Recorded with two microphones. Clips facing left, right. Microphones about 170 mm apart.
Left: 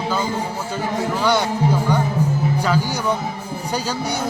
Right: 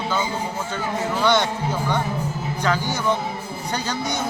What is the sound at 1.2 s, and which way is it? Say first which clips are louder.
Speech: left 1 dB; 10° left (ahead or behind).